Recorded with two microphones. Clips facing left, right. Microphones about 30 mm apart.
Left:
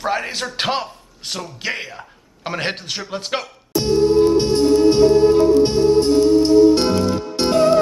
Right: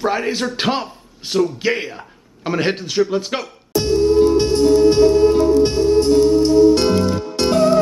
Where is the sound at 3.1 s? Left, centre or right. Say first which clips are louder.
Right 3 dB; centre.